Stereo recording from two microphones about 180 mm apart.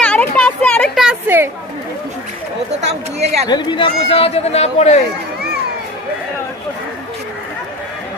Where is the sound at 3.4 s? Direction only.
25° left (ahead or behind).